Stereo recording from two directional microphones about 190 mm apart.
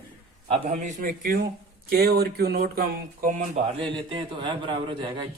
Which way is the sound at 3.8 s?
25° right (ahead or behind).